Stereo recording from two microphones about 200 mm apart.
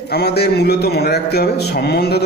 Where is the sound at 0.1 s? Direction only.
55° left (ahead or behind).